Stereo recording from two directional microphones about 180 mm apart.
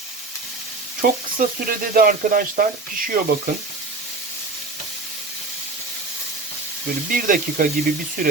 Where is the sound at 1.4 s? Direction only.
55° right (ahead or behind).